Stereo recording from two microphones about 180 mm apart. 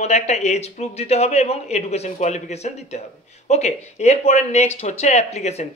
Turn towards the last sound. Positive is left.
turn(degrees=35)  # may be behind; listen again after turning